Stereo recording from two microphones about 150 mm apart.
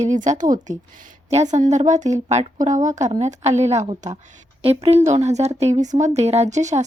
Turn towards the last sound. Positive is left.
turn(degrees=-50)  # may be behind; listen again after turning